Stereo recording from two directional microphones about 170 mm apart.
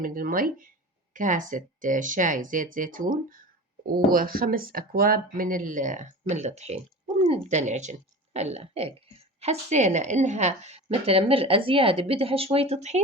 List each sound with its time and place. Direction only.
0.0 s speech: 55° right (ahead or behind); by 13.0 s 40° right (ahead or behind)